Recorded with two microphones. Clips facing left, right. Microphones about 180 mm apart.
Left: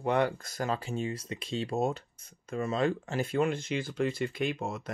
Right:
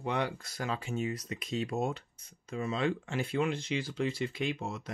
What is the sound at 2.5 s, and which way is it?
Speech, 45° left (ahead or behind).